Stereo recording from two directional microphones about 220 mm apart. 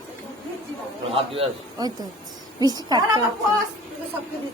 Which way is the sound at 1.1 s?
20° right (ahead or behind).